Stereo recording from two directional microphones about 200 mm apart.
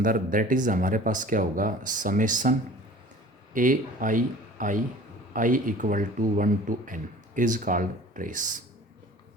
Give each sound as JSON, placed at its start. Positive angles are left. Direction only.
{"t": 0.0, "sound": "speech", "side_deg": -45}